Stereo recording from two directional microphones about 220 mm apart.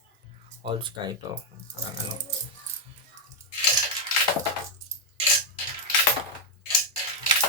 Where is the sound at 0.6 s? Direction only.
20° right (ahead or behind).